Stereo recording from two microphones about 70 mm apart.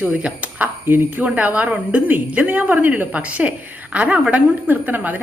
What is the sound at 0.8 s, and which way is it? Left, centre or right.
A woman's voice, right.